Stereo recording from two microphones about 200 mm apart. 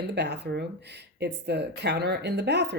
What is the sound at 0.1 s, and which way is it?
Speech, 55° right (ahead or behind).